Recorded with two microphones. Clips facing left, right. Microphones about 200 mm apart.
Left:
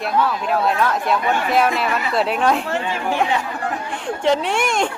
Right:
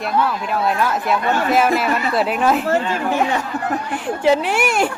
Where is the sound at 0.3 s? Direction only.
Centre (ahead or behind).